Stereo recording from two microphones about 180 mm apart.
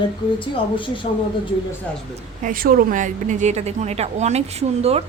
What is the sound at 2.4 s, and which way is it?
A woman's voice, 50° right (ahead or behind).